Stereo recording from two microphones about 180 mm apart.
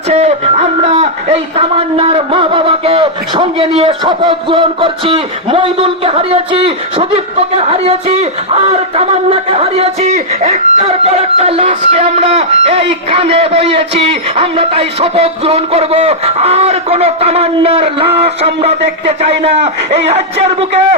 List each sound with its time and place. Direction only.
0.1 s a man's voice: 35° right (ahead or behind)